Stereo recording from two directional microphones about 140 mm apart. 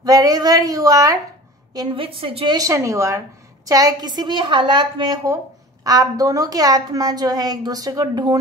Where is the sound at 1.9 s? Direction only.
40° right (ahead or behind).